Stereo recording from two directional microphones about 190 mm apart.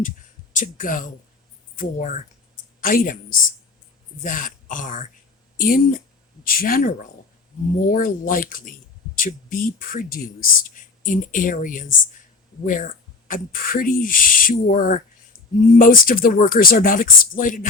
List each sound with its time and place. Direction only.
0.5 s speech: 45° left (ahead or behind)
4.2 s speech: 45° left (ahead or behind)